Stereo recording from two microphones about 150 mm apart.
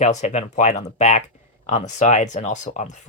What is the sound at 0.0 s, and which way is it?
Speech, 50° left (ahead or behind).